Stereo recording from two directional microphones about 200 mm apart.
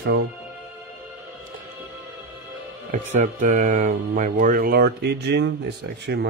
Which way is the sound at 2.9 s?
40° right (ahead or behind).